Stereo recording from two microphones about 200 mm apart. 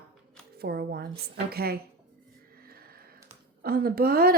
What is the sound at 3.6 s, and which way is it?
Speech, 50° right (ahead or behind).